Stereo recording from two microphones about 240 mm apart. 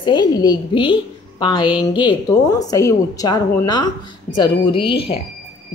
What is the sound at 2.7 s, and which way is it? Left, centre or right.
A woman's voice, centre.